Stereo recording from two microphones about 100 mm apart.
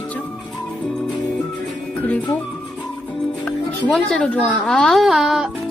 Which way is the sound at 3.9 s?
10° left (ahead or behind).